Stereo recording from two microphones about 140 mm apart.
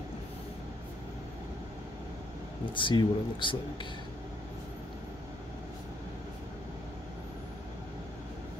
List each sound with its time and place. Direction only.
2.7 s speech: 35° left (ahead or behind)